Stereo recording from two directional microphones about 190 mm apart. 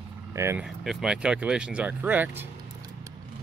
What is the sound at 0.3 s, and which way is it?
Speech, 15° right (ahead or behind).